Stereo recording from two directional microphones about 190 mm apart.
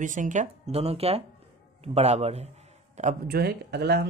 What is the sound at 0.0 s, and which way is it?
A man's voice, 45° right (ahead or behind).